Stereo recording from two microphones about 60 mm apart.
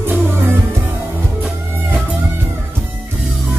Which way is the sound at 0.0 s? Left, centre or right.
Right.